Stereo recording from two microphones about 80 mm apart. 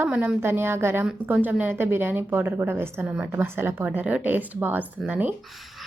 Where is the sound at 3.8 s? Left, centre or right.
Centre.